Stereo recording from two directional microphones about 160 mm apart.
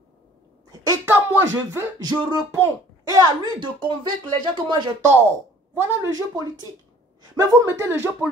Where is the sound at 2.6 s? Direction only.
25° right (ahead or behind).